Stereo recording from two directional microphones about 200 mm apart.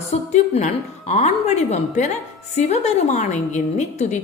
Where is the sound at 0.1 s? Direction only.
35° left (ahead or behind).